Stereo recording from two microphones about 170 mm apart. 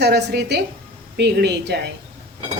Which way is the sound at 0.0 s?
80° right.